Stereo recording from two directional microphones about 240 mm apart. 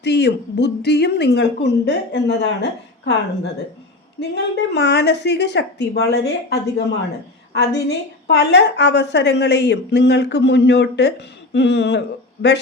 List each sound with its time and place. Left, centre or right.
0.0 s a woman's voice: left
4.2 s a woman's voice: left